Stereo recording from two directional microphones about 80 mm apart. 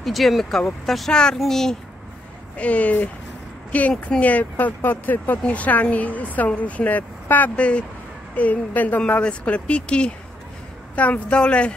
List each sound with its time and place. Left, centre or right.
0.0 s speech: centre
2.5 s speech: centre